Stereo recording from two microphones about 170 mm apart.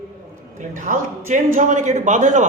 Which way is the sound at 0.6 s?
50° right (ahead or behind).